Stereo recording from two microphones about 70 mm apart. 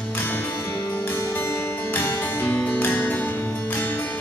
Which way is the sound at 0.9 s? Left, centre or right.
Left.